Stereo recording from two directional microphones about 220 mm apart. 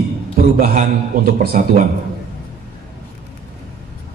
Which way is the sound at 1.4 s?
40° right (ahead or behind).